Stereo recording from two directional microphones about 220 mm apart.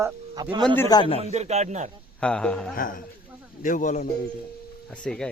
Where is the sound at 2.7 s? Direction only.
40° left (ahead or behind).